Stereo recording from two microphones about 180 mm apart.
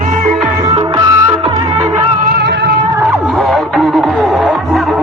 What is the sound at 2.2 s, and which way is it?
Music, 55° right (ahead or behind).